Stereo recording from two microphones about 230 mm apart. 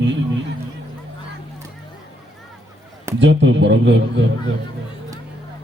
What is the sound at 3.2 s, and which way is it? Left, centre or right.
A man's voice, right.